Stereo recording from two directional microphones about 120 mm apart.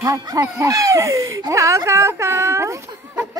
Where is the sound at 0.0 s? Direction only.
30° right (ahead or behind).